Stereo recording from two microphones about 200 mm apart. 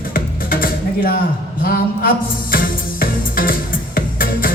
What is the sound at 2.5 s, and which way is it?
Music, 45° left (ahead or behind).